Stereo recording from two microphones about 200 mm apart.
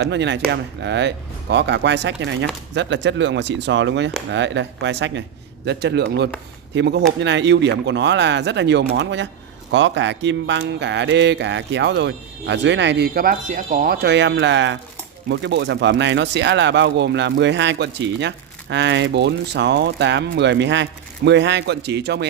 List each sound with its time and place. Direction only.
0.0 s speech: 60° right (ahead or behind)